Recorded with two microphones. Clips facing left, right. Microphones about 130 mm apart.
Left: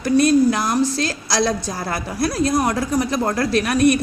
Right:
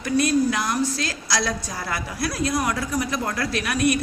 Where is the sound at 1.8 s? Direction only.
40° left (ahead or behind).